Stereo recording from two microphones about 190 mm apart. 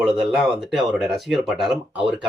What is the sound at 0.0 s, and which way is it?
Speech, centre (ahead or behind).